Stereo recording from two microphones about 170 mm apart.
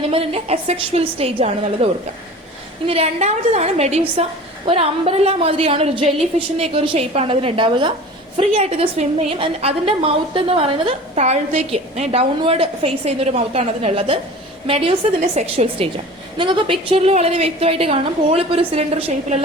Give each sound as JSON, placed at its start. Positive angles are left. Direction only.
{"t": 0.1, "sound": "a woman's voice", "side_deg": -35}